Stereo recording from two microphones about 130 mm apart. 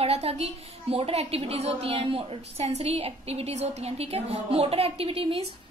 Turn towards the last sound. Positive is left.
turn(degrees=-45)  # may be behind; listen again after turning